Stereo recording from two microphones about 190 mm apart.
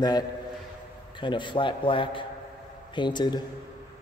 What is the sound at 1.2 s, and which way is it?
A man's voice, 25° left (ahead or behind).